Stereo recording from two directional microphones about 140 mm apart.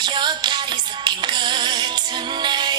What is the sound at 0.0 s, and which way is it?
Music, 30° right (ahead or behind).